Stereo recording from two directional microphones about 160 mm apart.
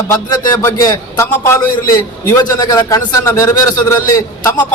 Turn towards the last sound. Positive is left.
turn(degrees=20)  # may be behind; listen again after turning